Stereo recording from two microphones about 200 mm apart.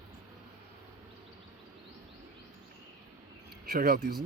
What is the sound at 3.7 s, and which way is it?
Speech, 45° right (ahead or behind).